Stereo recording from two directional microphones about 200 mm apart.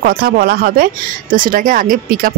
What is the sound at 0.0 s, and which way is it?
Speech, 50° right (ahead or behind).